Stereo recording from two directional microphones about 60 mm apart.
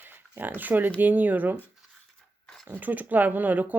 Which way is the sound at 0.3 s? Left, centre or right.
Right.